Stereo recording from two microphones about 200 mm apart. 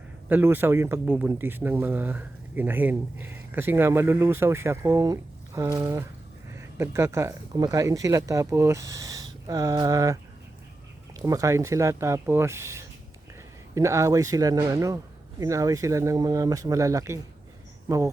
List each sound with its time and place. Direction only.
0.3 s speech: 10° right (ahead or behind)
11.3 s speech: 15° right (ahead or behind)